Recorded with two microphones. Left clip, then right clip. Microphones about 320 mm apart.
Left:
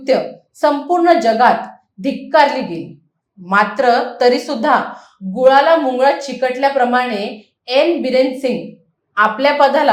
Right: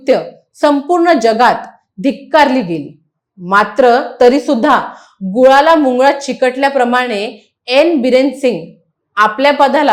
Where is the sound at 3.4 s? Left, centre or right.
Right.